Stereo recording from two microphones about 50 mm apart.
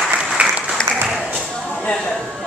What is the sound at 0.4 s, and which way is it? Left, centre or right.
Applause, right.